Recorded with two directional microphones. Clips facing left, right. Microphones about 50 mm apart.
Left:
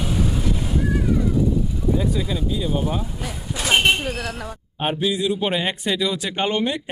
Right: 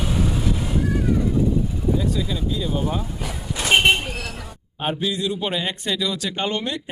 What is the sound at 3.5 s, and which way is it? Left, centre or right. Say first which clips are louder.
Vehicle: right 1 dB; centre.